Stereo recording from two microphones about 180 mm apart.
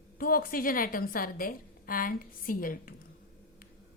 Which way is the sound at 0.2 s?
50° left (ahead or behind).